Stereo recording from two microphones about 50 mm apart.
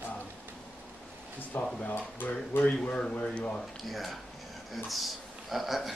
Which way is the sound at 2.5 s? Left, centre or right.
Left.